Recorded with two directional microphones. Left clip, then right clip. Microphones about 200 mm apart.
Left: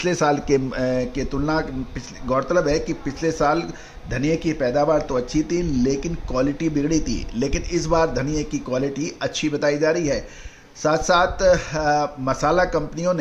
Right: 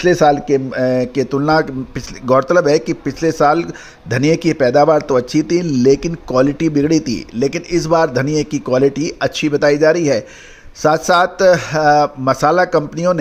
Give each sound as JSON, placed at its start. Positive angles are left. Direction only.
{"t": 0.0, "sound": "speech", "side_deg": -20}